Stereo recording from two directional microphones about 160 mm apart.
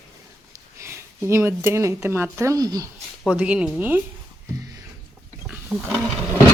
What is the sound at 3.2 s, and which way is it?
Speech, 10° right (ahead or behind).